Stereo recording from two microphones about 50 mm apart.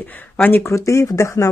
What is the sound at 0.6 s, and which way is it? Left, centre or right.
Speech, left.